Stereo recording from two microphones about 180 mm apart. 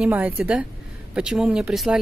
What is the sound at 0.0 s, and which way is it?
A woman's voice, 5° right (ahead or behind).